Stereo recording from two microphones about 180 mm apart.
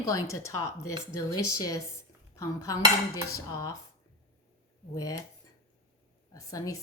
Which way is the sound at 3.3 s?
20° left (ahead or behind).